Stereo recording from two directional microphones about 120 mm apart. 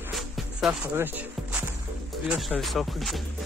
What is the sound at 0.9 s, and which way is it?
Music, 15° right (ahead or behind).